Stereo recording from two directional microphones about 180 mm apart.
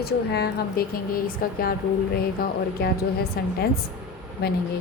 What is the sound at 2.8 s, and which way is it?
A woman's voice, 55° left (ahead or behind).